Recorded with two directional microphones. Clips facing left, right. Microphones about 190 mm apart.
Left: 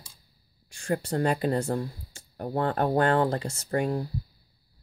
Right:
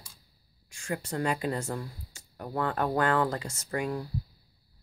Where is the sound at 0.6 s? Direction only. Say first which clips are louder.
Left 6 dB; 35° left (ahead or behind).